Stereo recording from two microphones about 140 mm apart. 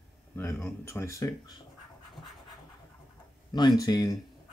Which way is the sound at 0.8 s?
20° left (ahead or behind).